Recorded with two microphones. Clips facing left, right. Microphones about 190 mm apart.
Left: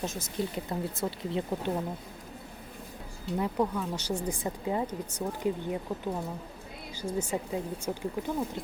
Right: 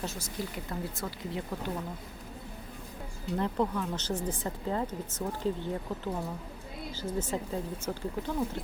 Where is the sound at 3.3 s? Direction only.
10° left (ahead or behind).